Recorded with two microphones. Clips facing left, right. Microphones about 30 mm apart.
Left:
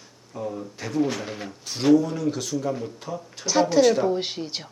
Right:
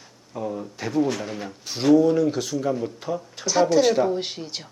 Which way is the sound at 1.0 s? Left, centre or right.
Centre.